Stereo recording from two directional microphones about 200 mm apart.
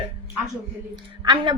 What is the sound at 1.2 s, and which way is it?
Speech, 20° right (ahead or behind).